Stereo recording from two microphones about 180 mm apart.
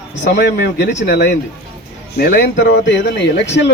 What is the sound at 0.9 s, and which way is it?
Speech, 40° left (ahead or behind).